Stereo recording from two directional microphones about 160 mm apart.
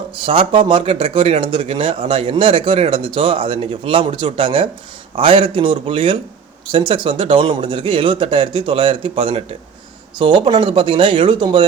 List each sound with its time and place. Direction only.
0.2 s speech: 35° right (ahead or behind)